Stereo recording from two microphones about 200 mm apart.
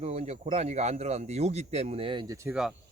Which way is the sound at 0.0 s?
35° right (ahead or behind).